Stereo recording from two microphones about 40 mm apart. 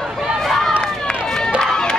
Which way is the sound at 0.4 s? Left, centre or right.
Centre.